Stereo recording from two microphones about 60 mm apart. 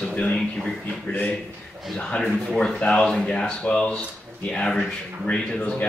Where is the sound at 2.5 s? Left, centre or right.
Centre.